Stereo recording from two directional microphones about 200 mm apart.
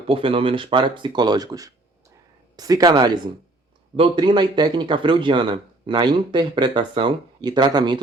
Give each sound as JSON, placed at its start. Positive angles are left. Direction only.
{"t": 0.1, "sound": "speech", "side_deg": -25}